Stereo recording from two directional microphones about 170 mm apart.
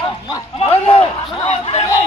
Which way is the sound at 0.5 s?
35° left (ahead or behind).